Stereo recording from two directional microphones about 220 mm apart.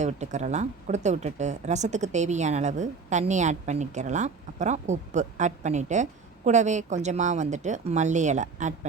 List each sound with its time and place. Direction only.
0.0 s speech: 30° right (ahead or behind)